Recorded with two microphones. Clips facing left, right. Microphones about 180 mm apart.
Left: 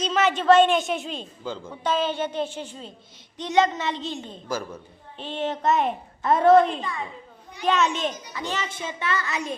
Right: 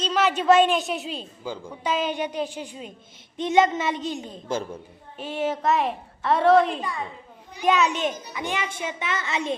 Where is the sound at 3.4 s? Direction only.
20° right (ahead or behind).